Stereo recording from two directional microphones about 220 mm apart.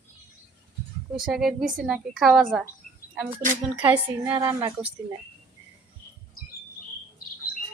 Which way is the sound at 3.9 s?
10° right (ahead or behind).